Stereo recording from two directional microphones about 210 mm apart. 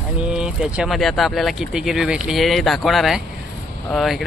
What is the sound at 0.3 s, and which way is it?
Speech, 5° right (ahead or behind).